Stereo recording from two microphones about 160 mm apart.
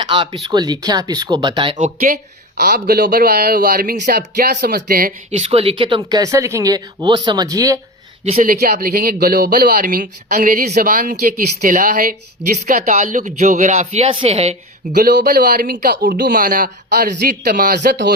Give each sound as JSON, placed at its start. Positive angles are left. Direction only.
{"t": 0.0, "sound": "speech", "side_deg": -30}
{"t": 1.8, "sound": "speech", "side_deg": -60}
{"t": 2.6, "sound": "speech", "side_deg": -75}
{"t": 5.4, "sound": "speech", "side_deg": -40}
{"t": 8.4, "sound": "speech", "side_deg": -65}
{"t": 14.9, "sound": "speech", "side_deg": -75}